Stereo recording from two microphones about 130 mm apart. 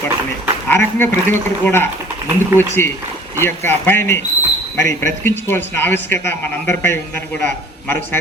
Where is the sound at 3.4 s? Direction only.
15° left (ahead or behind).